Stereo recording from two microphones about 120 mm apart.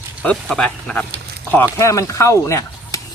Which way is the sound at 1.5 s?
20° left (ahead or behind).